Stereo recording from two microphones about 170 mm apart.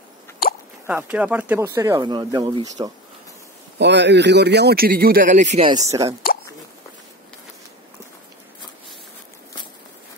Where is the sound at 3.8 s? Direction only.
90° right; by 5.7 s 40° right (ahead or behind).